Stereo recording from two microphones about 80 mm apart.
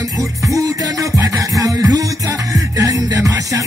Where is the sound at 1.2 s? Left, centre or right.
Right.